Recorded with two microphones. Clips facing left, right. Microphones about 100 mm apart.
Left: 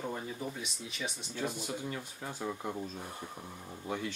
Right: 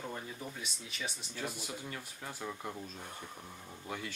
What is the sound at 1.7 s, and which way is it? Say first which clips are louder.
Speech: left 5 dB; 15° left (ahead or behind).